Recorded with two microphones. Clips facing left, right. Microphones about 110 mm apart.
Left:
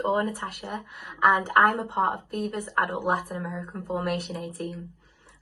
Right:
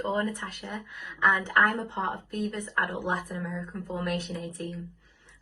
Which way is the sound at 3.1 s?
40° left (ahead or behind).